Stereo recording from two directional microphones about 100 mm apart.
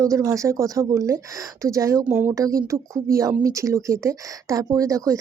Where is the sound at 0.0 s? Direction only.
30° right (ahead or behind).